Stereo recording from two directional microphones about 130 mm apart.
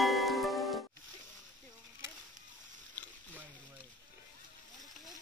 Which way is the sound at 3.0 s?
15° left (ahead or behind).